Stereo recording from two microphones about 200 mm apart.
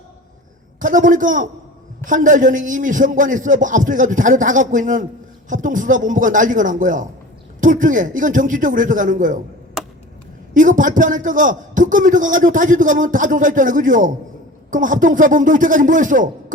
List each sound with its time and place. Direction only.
0.8 s a man's voice: 40° right (ahead or behind)
10.5 s a man's voice: 40° right (ahead or behind)